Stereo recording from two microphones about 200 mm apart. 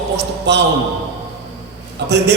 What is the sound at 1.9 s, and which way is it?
Speech, 55° right (ahead or behind).